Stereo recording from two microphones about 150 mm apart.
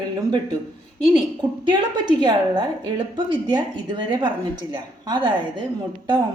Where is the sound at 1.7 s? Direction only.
30° right (ahead or behind).